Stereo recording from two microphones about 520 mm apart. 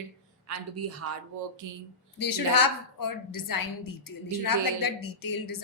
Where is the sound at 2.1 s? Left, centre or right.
Left.